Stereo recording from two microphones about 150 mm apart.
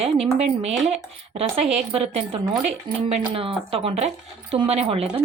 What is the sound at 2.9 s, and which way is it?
Speech, 30° right (ahead or behind).